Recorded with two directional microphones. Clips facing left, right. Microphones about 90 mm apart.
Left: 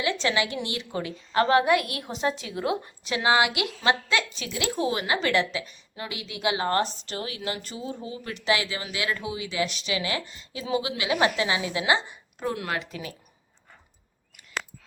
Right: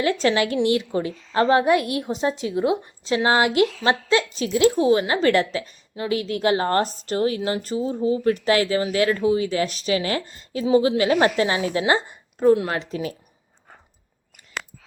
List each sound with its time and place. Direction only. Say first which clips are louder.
0.0 s a woman's voice: right 6 dB; 40° right (ahead or behind)
3.2 s a woman's voice: right 4 dB; 40° right (ahead or behind)